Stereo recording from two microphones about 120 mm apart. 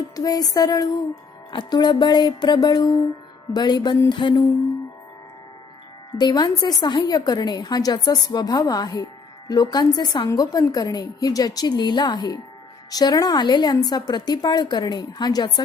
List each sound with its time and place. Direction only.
0.2 s a woman's voice: 30° left (ahead or behind)
6.1 s a woman's voice: 35° left (ahead or behind)